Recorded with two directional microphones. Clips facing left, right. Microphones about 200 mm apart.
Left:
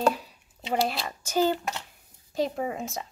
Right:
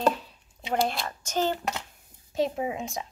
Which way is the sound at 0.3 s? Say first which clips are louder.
Even; 5° left (ahead or behind).